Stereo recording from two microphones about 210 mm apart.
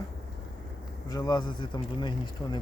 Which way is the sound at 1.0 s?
20° left (ahead or behind).